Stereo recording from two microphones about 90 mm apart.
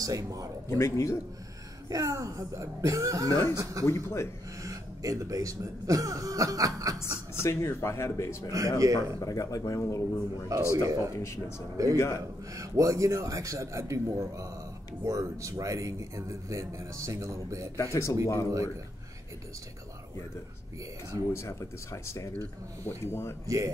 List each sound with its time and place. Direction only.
0.0 s speech: 40° right (ahead or behind)
0.7 s speech: 30° left (ahead or behind)
1.9 s speech: 40° right (ahead or behind)
3.3 s speech: 35° left (ahead or behind)
4.6 s speech: 40° right (ahead or behind)
7.0 s speech: 30° left (ahead or behind)
8.5 s speech: 40° right (ahead or behind)
9.2 s speech: 40° left (ahead or behind)
10.5 s speech: 35° right (ahead or behind)
11.1 s speech: 30° left (ahead or behind)
11.7 s speech: 40° right (ahead or behind)
17.7 s speech: 30° left (ahead or behind)
21.3 s speech: 30° left (ahead or behind)
23.4 s speech: 35° right (ahead or behind)